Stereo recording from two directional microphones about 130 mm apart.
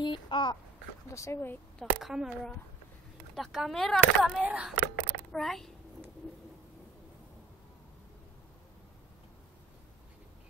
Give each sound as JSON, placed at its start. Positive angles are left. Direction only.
{"t": 0.0, "sound": "speech", "side_deg": 35}
{"t": 1.1, "sound": "speech", "side_deg": 20}
{"t": 1.8, "sound": "speech", "side_deg": 0}
{"t": 4.4, "sound": "speech", "side_deg": -10}
{"t": 5.1, "sound": "a sound", "side_deg": 5}